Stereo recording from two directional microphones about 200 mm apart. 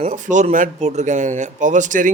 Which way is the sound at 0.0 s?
40° right (ahead or behind).